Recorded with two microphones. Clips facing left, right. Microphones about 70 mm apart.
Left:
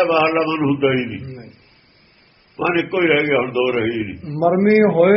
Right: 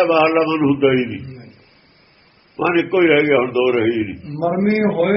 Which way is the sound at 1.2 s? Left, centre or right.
Left.